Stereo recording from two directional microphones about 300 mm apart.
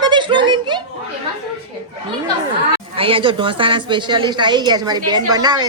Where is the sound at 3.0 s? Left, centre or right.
Centre.